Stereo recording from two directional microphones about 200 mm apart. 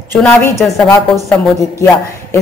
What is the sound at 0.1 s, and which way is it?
A woman's voice, 10° left (ahead or behind).